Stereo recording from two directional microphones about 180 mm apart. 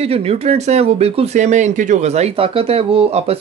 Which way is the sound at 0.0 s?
35° right (ahead or behind).